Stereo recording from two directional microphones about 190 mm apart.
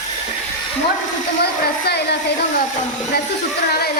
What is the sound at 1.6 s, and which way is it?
Speech, 60° left (ahead or behind).